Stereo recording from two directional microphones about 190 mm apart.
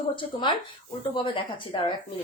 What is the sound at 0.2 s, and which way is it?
A woman's voice, 25° left (ahead or behind).